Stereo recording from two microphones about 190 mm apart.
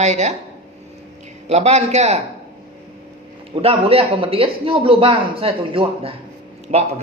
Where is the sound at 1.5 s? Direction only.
35° right (ahead or behind).